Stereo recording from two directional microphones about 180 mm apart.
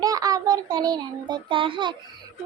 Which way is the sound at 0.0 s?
20° right (ahead or behind).